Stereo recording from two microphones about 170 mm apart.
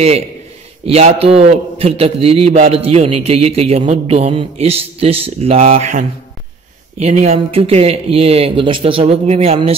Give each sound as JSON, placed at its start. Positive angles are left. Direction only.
{"t": 0.8, "sound": "a man's voice", "side_deg": -35}